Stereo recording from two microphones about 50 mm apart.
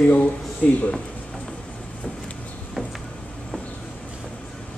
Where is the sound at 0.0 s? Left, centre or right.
Left.